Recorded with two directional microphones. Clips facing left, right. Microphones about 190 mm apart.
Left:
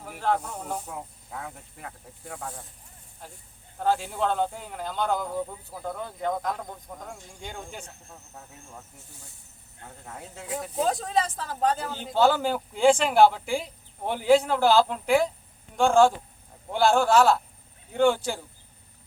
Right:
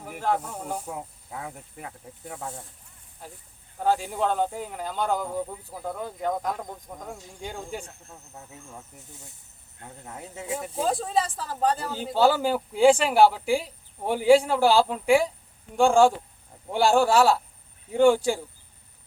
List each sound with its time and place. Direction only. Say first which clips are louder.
0.0 s speech: even; 10° right (ahead or behind)
3.8 s speech: right 1 dB; 10° right (ahead or behind)
7.0 s speech: right 3 dB; 5° right (ahead or behind)
10.1 s speech: right 3 dB; 15° right (ahead or behind)
10.5 s speech: even; 5° right (ahead or behind)